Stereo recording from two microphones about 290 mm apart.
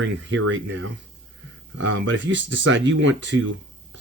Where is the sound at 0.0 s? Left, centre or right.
Right.